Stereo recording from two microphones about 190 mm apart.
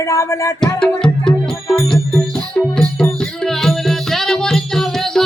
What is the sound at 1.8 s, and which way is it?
Music, 5° left (ahead or behind).